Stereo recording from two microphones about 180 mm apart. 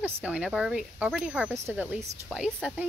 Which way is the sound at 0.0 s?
5° right (ahead or behind).